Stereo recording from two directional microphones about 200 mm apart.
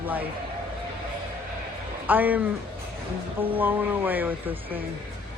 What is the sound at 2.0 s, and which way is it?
Speech, 10° right (ahead or behind).